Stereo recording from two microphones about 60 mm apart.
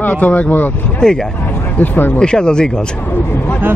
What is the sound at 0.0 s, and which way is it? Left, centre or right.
Speech, left.